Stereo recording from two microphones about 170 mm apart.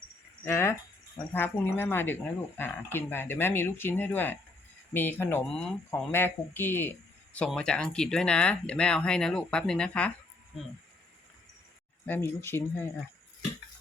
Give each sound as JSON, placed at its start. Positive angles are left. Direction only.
{"t": 0.4, "sound": "speech", "side_deg": 15}
{"t": 12.0, "sound": "speech", "side_deg": 10}